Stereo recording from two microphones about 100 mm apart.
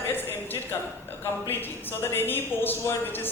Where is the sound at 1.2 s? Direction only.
20° left (ahead or behind).